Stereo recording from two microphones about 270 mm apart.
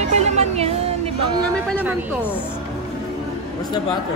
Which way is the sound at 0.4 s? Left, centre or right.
Right.